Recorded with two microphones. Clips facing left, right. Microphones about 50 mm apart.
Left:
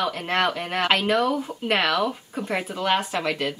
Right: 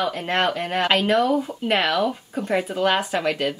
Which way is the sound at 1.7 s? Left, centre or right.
Centre.